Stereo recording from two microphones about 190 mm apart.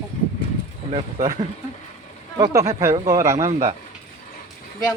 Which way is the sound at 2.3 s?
15° right (ahead or behind).